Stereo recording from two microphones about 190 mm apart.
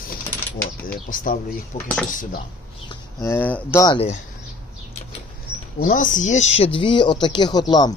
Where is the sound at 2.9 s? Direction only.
15° left (ahead or behind).